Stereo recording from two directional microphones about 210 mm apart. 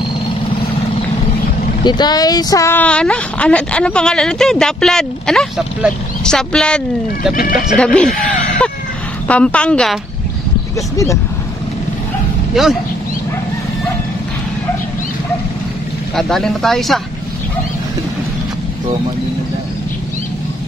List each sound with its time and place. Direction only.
1.9 s speech: 20° left (ahead or behind); by 6.8 s 5° left (ahead or behind)
7.3 s speech: 40° left (ahead or behind)
7.6 s speech: 5° left (ahead or behind)
9.3 s speech: 5° left (ahead or behind)
12.6 s speech: centre (ahead or behind)
16.2 s speech: centre (ahead or behind)